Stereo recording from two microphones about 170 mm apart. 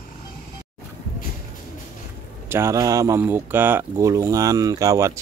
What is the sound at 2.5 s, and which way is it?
Speech, 15° right (ahead or behind).